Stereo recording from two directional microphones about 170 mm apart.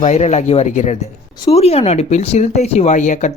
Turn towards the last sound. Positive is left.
turn(degrees=45)  # may be behind; listen again after turning